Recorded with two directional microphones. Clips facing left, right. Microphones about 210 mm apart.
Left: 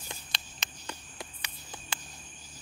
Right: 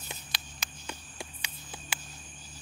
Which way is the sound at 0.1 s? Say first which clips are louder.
Even; 5° right (ahead or behind).